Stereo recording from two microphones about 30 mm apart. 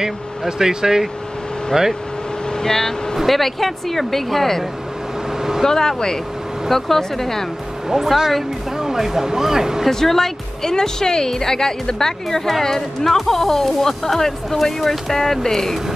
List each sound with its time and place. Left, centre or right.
0.0 s speech: centre
2.5 s speech: centre
3.3 s speech: centre
5.7 s speech: centre
6.7 s speech: centre
8.7 s speech: centre
9.8 s speech: centre